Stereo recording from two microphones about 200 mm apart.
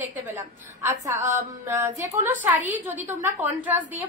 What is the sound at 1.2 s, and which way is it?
Mantra, 40° right (ahead or behind).